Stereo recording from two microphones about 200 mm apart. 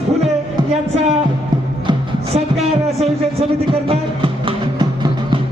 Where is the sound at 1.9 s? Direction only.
30° right (ahead or behind).